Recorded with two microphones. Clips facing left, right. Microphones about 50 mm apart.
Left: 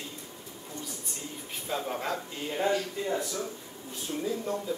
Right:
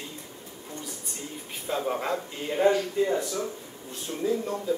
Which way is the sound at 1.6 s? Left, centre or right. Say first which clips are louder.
Right 4 dB; centre.